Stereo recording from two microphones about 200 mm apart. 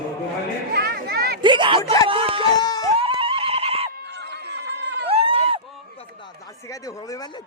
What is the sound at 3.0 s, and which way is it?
Horse, 25° right (ahead or behind).